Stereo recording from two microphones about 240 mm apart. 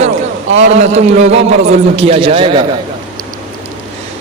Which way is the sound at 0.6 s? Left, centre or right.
Right.